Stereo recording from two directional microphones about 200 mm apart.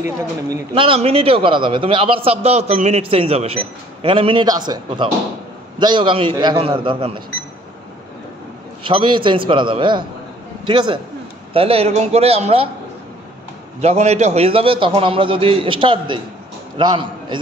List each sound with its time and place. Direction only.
0.7 s a man's voice: 30° right (ahead or behind)
8.8 s a man's voice: 25° right (ahead or behind)
13.7 s a man's voice: 35° right (ahead or behind)